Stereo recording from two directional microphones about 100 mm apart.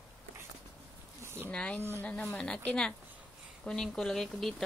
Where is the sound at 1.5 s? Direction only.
10° left (ahead or behind).